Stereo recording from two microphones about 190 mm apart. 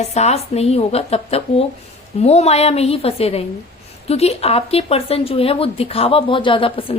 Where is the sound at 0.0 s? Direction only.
35° left (ahead or behind).